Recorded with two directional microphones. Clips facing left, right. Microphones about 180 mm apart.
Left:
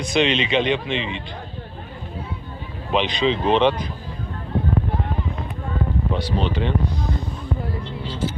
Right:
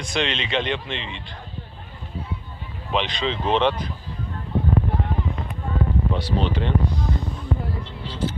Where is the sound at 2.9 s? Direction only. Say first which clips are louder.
Left 4 dB; 10° left (ahead or behind).